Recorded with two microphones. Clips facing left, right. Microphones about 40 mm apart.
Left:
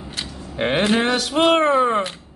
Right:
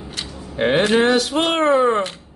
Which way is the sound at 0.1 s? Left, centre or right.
Centre.